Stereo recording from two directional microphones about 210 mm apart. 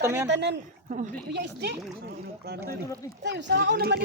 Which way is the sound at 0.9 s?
40° right (ahead or behind).